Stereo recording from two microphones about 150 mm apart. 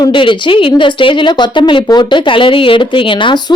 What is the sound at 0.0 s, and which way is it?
Speech, 35° left (ahead or behind).